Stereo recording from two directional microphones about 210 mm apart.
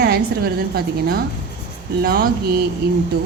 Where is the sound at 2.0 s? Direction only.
45° right (ahead or behind).